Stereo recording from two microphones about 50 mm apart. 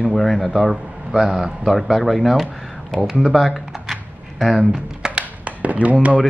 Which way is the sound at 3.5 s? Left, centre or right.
Centre.